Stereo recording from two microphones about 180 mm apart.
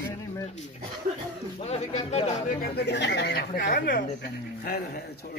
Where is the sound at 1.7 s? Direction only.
35° left (ahead or behind).